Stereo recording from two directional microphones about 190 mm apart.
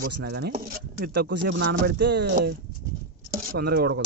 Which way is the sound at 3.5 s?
55° right (ahead or behind).